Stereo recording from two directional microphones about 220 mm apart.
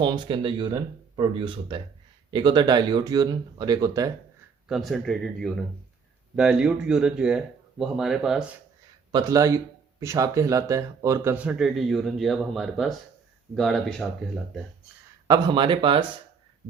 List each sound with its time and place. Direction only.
0.0 s speech: 20° right (ahead or behind)
4.7 s speech: centre (ahead or behind)
9.1 s speech: 15° right (ahead or behind); by 14.1 s centre (ahead or behind)
15.3 s speech: 20° right (ahead or behind)